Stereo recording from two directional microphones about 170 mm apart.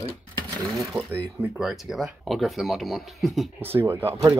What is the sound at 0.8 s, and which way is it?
Speech, centre (ahead or behind).